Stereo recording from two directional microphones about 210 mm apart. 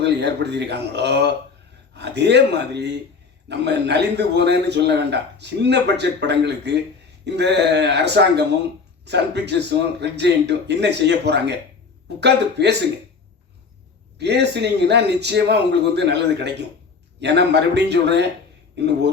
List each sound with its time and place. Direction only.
0.0 s a man's voice: 55° right (ahead or behind)
14.2 s a man's voice: 55° right (ahead or behind)